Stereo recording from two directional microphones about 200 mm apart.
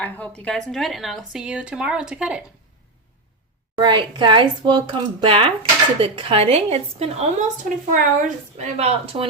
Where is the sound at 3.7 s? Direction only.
25° right (ahead or behind).